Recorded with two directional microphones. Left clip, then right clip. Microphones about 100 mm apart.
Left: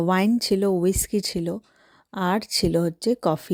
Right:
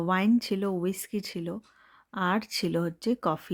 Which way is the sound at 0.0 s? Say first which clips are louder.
Left 4 dB; 60° left (ahead or behind).